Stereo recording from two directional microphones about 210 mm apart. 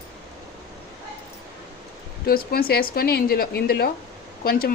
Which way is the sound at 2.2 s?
45° left (ahead or behind).